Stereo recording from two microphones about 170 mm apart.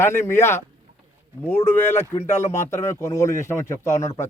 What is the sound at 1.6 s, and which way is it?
A man's voice, 15° left (ahead or behind).